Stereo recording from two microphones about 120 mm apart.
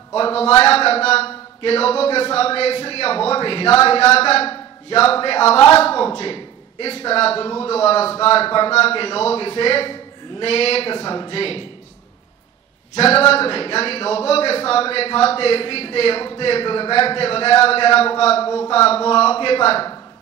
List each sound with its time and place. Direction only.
0.1 s a man's voice: 55° left (ahead or behind)
12.9 s speech: 55° left (ahead or behind)